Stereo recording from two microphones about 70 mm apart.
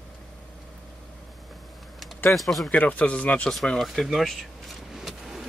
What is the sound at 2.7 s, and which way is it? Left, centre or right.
Speech, centre.